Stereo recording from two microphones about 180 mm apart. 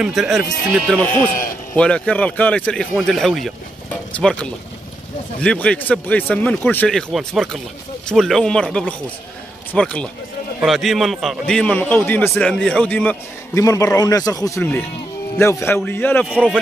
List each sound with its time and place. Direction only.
0.0 s a man's voice: centre (ahead or behind)
5.4 s a man's voice: 5° left (ahead or behind)
13.9 s speech: 20° left (ahead or behind)
16.3 s a man's voice: 5° right (ahead or behind)